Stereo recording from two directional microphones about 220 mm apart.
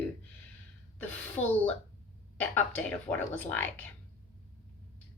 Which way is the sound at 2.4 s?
5° left (ahead or behind).